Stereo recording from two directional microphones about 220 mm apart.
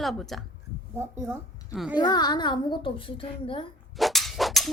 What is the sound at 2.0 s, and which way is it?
A child's voice, 20° left (ahead or behind).